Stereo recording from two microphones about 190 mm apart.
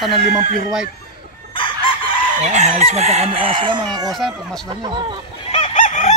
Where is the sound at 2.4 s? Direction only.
35° right (ahead or behind).